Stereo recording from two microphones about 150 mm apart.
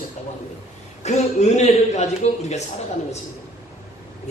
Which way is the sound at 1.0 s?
50° left (ahead or behind).